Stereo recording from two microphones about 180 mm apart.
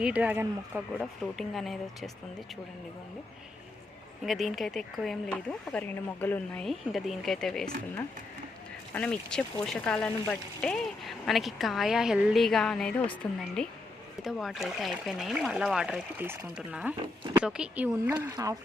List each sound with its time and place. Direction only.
0.0 s speech: 5° right (ahead or behind)
4.2 s speech: centre (ahead or behind)
8.9 s speech: 5° left (ahead or behind)
18.1 s speech: 20° right (ahead or behind)